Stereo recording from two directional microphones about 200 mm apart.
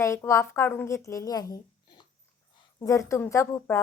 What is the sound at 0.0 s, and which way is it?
A woman's voice, 15° left (ahead or behind).